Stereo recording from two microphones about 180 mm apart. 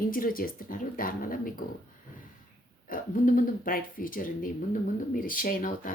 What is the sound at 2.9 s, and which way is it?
Speech, 50° left (ahead or behind).